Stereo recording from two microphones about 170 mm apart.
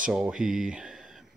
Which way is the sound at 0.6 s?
5° right (ahead or behind).